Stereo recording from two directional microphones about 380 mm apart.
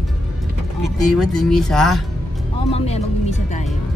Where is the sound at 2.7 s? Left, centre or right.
Centre.